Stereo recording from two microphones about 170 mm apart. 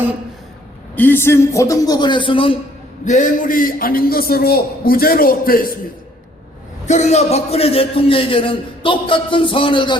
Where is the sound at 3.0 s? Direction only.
50° left (ahead or behind).